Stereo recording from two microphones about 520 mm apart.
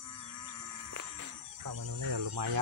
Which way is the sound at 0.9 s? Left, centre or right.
Right.